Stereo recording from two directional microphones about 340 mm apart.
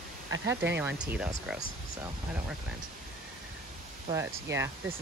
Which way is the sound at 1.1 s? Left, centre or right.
Centre.